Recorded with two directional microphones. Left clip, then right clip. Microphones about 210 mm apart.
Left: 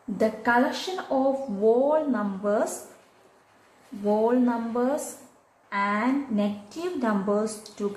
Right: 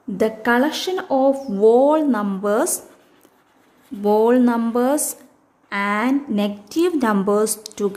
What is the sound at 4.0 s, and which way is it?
A woman's voice, 50° right (ahead or behind).